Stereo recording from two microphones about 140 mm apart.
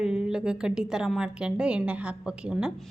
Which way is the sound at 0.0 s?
5° right (ahead or behind).